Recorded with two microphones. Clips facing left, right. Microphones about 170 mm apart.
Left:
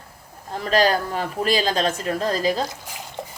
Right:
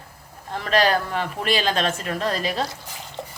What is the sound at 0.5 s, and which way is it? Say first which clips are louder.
Speech: left 1 dB; 35° left (ahead or behind).